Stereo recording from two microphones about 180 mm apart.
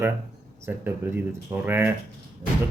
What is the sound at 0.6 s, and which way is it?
Speech, 15° right (ahead or behind).